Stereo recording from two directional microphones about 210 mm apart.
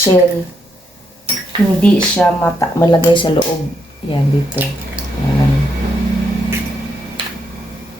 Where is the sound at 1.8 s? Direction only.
5° left (ahead or behind); by 3.4 s 25° left (ahead or behind).